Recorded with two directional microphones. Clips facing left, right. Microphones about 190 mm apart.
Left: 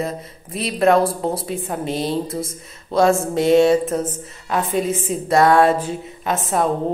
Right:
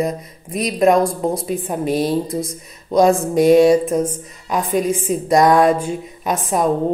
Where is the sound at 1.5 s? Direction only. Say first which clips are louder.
Right 3 dB; 15° right (ahead or behind).